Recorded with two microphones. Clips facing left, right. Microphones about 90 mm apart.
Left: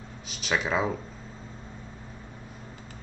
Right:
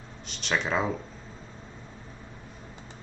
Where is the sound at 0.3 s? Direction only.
5° left (ahead or behind).